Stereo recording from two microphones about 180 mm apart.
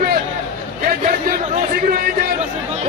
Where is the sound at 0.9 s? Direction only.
55° right (ahead or behind).